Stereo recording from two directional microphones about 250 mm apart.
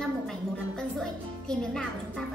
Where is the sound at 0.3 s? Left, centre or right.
Centre.